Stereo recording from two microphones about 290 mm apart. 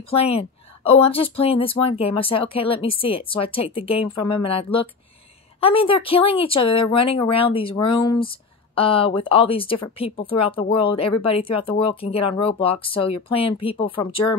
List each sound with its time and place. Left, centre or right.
0.1 s speech: centre